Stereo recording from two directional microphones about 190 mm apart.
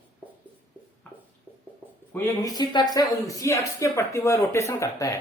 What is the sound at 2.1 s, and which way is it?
Speech, 15° left (ahead or behind).